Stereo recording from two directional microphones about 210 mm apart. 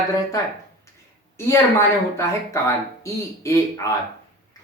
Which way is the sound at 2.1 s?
15° left (ahead or behind).